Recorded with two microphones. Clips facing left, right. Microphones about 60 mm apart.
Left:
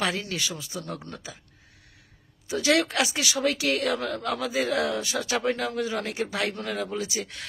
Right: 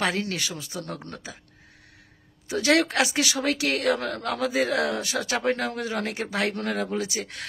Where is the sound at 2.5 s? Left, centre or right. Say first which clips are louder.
Right 2 dB; right.